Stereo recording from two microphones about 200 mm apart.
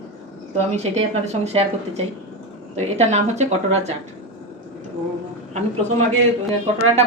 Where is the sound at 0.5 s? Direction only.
35° right (ahead or behind).